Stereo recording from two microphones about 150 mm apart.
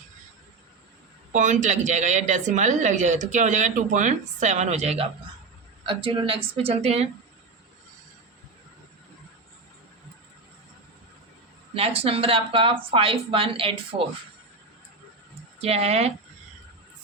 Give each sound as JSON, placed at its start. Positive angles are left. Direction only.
{"t": 1.3, "sound": "speech", "side_deg": -55}
{"t": 5.8, "sound": "speech", "side_deg": -35}
{"t": 11.7, "sound": "speech", "side_deg": -40}
{"t": 15.5, "sound": "speech", "side_deg": -45}